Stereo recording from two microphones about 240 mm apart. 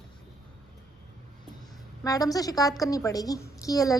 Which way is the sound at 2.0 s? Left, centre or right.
Centre.